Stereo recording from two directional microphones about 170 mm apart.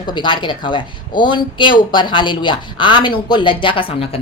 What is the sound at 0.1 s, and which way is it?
A woman's voice, 25° left (ahead or behind).